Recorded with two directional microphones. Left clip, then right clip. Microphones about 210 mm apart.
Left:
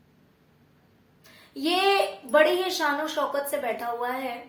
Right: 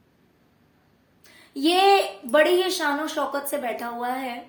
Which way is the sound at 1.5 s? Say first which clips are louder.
Right 5 dB; 40° right (ahead or behind).